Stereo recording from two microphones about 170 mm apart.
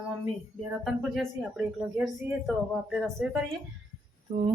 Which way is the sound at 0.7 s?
Centre (ahead or behind).